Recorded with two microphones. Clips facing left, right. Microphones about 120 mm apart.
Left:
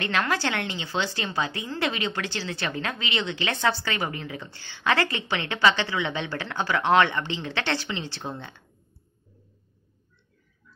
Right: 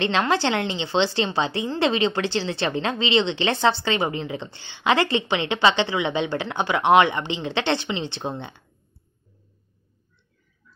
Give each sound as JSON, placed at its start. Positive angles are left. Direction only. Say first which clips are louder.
{"t": 0.0, "sound": "a woman's voice", "louder": "right 5 dB", "side_deg": -25}